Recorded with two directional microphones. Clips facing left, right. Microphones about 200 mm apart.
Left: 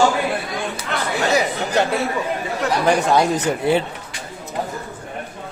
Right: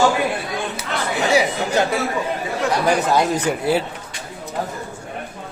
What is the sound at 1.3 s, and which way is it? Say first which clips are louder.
Speech: right 2 dB; 10° right (ahead or behind).